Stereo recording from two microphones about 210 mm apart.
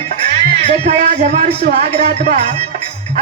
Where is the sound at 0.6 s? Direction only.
30° right (ahead or behind).